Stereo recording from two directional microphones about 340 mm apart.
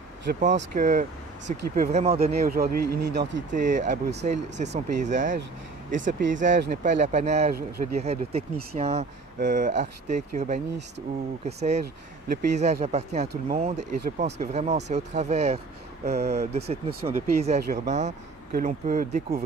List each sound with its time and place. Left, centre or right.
0.2 s speech: right